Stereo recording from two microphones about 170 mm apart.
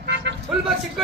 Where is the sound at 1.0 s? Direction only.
Centre (ahead or behind).